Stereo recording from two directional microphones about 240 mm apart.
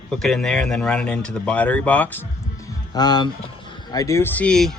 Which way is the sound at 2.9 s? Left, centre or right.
Centre.